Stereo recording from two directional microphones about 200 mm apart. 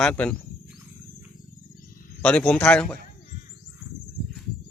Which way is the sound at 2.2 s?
5° left (ahead or behind).